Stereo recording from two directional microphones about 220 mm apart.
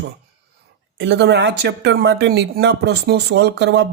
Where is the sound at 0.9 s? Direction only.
55° right (ahead or behind).